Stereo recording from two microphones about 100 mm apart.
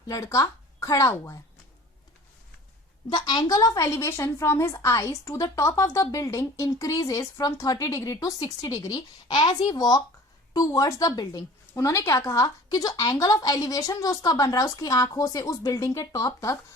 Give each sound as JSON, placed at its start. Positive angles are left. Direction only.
{"t": 0.1, "sound": "speech", "side_deg": 35}
{"t": 3.1, "sound": "a woman's voice", "side_deg": 45}